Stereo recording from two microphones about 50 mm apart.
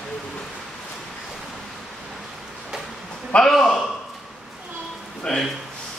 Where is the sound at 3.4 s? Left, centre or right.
Centre.